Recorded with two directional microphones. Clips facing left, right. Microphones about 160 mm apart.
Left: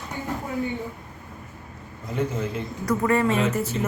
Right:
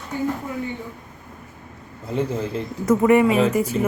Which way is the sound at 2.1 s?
30° right (ahead or behind).